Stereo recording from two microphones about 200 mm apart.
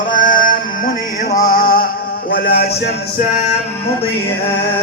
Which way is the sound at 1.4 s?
45° left (ahead or behind).